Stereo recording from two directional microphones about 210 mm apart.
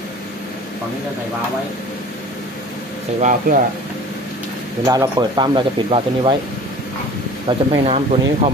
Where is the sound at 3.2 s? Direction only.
40° right (ahead or behind).